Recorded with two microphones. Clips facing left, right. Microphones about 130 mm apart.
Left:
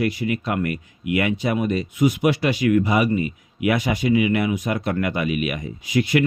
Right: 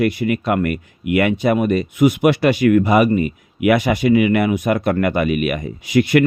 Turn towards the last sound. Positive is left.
turn(degrees=-65)  # may be behind; listen again after turning